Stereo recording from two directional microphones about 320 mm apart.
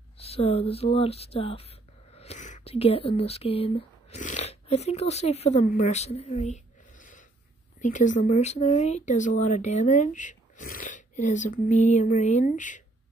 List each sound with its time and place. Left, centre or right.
0.2 s speech: centre